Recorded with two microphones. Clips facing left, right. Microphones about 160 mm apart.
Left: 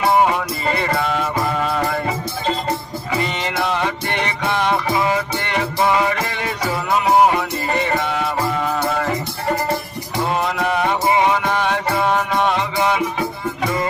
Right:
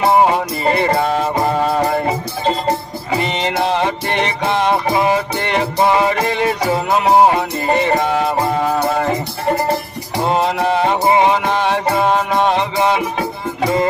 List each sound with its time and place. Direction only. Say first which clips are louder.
0.0 s music: right 3 dB; 25° right (ahead or behind)
1.0 s music: right 4 dB; 40° right (ahead or behind)
10.2 s music: right 4 dB; 25° right (ahead or behind)